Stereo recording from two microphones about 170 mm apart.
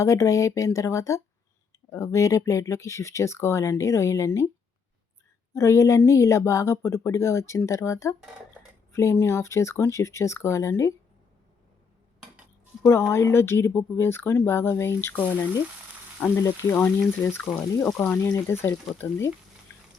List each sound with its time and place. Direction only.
0.0 s speech: 20° left (ahead or behind)
5.5 s speech: 15° left (ahead or behind)
12.8 s speech: 15° left (ahead or behind)